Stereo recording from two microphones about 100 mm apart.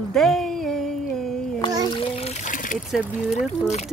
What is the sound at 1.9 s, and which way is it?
Water, 65° left (ahead or behind).